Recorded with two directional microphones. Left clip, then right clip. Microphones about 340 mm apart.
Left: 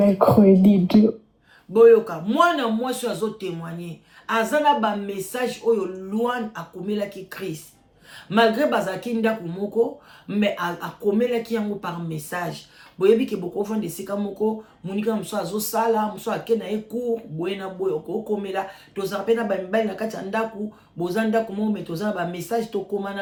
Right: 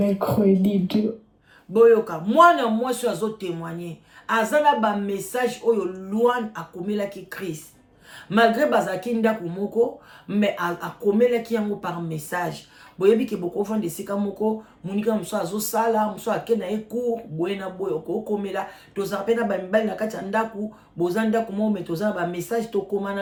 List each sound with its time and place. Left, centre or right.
0.2 s speech: centre
1.7 s speech: centre